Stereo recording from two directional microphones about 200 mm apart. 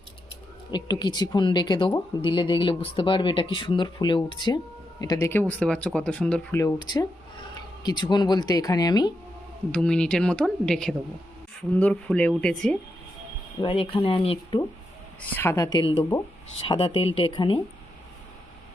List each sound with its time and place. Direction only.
0.7 s speech: 20° left (ahead or behind)
9.7 s speech: 5° left (ahead or behind)
13.6 s speech: 25° left (ahead or behind)
15.4 s speech: 15° left (ahead or behind)